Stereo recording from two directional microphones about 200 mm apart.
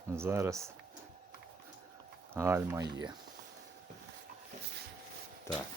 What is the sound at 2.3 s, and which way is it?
Speech, 15° right (ahead or behind).